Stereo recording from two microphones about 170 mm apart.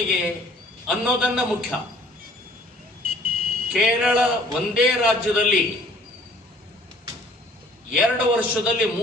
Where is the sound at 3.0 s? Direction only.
60° right (ahead or behind).